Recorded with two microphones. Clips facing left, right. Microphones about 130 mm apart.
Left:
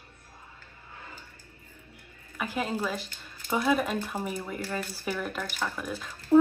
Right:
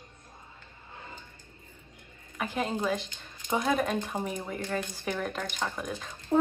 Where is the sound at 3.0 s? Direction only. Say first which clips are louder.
Even; 20° right (ahead or behind).